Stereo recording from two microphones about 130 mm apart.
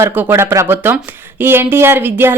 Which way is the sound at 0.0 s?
15° right (ahead or behind).